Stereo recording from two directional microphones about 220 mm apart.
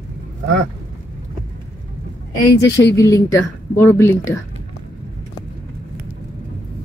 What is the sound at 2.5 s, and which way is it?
Speech, 50° left (ahead or behind).